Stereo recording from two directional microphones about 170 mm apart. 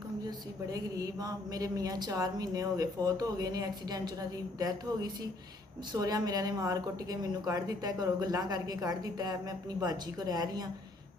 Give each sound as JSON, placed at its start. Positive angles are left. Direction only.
{"t": 0.3, "sound": "a woman's voice", "side_deg": -20}